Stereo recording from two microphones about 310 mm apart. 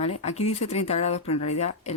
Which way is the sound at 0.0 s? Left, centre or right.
Centre.